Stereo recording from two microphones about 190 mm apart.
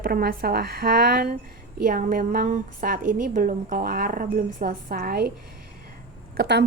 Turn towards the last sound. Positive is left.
turn(degrees=-65)  # may be behind; listen again after turning